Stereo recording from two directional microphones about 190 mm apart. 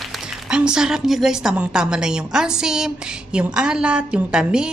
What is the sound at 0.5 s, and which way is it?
A woman's voice, 5° right (ahead or behind).